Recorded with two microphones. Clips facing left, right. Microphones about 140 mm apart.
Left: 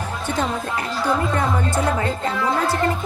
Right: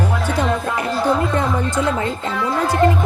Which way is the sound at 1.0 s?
20° right (ahead or behind).